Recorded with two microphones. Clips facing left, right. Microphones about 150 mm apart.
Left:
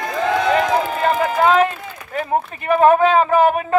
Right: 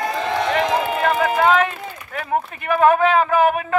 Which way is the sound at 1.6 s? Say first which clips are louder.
Left 4 dB; 35° left (ahead or behind).